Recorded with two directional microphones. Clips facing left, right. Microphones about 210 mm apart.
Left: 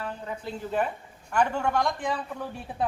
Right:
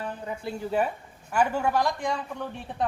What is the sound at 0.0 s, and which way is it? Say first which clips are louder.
Speech: right 1 dB; 15° right (ahead or behind).